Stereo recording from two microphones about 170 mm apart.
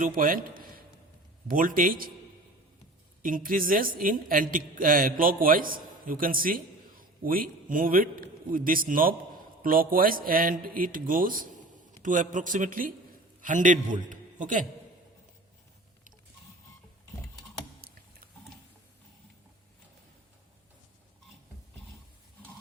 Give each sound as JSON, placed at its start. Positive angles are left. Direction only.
{"t": 0.0, "sound": "a woman's voice", "side_deg": -55}
{"t": 3.2, "sound": "a woman's voice", "side_deg": -55}
{"t": 17.7, "sound": "a sound", "side_deg": -65}